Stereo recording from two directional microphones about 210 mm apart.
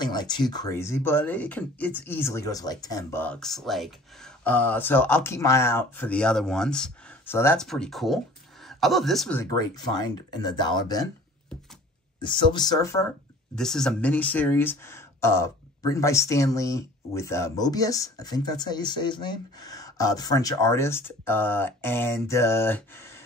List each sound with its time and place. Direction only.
0.0 s speech: 20° left (ahead or behind); by 9.4 s centre (ahead or behind)
9.4 s speech: 20° left (ahead or behind)
12.2 s speech: 20° left (ahead or behind)
13.6 s speech: 5° left (ahead or behind)